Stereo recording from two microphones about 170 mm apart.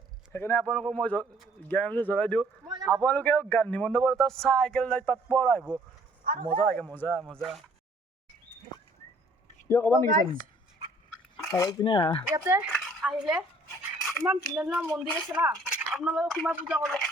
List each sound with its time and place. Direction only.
0.3 s speech: 10° left (ahead or behind)
2.6 s a sound: 20° right (ahead or behind)
2.9 s speech: 10° left (ahead or behind)
6.2 s a man's voice: 55° right (ahead or behind)
6.6 s speech: 5° left (ahead or behind)
9.6 s speech: 15° left (ahead or behind)
11.5 s speech: 20° left (ahead or behind)
12.3 s speech: 15° right (ahead or behind)
12.7 s dishes: centre (ahead or behind)
14.0 s speech: centre (ahead or behind)